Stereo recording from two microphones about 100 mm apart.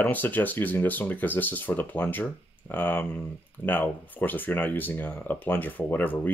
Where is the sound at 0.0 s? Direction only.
20° left (ahead or behind).